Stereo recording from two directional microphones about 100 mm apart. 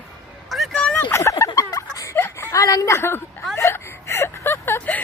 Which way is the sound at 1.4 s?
35° left (ahead or behind).